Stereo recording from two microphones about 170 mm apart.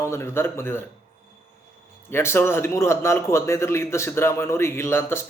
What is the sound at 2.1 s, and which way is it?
Speech, 15° left (ahead or behind).